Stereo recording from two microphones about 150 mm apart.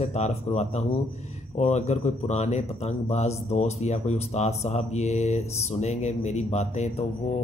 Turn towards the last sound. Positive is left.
turn(degrees=50)  # may be behind; listen again after turning